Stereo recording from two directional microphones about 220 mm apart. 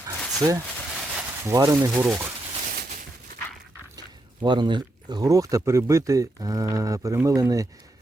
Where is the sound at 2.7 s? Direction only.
45° right (ahead or behind).